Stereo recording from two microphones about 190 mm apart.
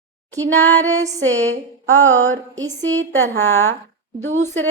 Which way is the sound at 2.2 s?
90° right.